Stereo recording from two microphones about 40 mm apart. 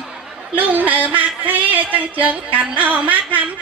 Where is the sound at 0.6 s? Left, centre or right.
Right.